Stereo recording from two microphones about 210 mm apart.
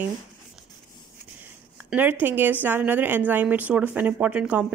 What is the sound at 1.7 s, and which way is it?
A woman's voice, 10° right (ahead or behind).